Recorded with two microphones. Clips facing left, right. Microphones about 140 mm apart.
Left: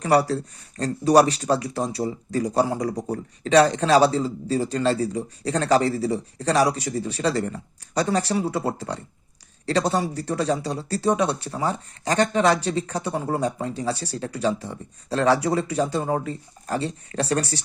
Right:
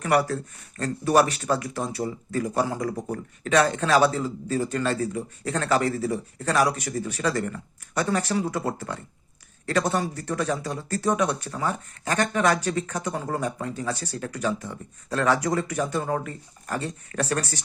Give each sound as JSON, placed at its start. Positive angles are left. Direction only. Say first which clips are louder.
{"t": 0.0, "sound": "speech", "louder": "left 3 dB", "side_deg": 30}